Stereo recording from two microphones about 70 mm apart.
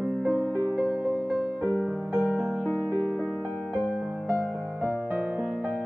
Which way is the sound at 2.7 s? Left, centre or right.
Left.